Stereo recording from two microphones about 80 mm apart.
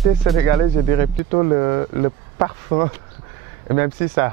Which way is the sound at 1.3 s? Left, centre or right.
Right.